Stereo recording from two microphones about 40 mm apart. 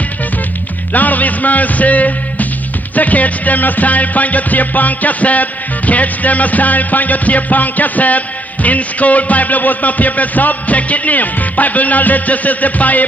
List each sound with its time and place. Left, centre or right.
0.9 s a man's voice: left
3.0 s music: left
8.6 s a man's voice: left